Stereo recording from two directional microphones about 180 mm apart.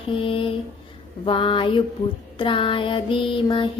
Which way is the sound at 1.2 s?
30° left (ahead or behind).